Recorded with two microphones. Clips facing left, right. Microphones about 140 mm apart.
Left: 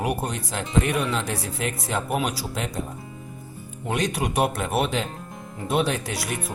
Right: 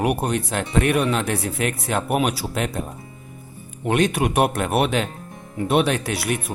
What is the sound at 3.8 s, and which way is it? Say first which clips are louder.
Speech: right 6 dB; 60° right (ahead or behind).